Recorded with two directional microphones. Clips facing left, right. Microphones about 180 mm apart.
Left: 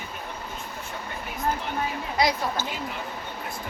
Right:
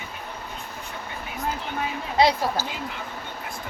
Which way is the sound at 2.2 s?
25° right (ahead or behind).